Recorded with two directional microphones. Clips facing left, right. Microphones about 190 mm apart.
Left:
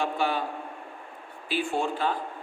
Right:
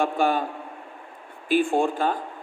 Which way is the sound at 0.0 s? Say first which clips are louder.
Right 5 dB; 45° right (ahead or behind).